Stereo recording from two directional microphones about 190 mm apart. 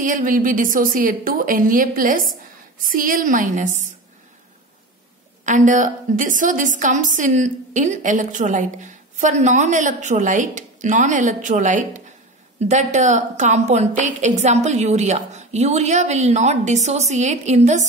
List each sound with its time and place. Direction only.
0.0 s a woman's voice: 45° right (ahead or behind)
5.4 s a woman's voice: 40° right (ahead or behind)